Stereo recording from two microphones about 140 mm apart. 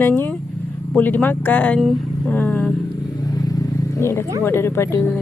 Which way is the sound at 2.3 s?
10° left (ahead or behind).